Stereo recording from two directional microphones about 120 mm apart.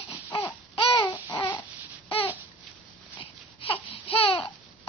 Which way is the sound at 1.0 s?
35° left (ahead or behind).